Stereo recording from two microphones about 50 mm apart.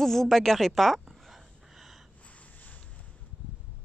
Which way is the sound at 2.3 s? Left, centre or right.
Left.